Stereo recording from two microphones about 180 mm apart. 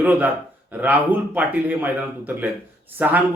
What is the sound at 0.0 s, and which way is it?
A man's voice, 10° right (ahead or behind).